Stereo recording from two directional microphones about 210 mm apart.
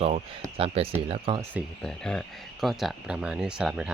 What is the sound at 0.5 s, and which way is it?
Speech, 25° right (ahead or behind).